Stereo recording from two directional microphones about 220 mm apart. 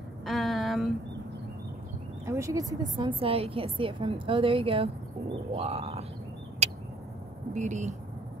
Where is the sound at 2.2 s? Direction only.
15° right (ahead or behind).